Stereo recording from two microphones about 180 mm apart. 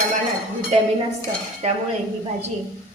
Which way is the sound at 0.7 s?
35° right (ahead or behind).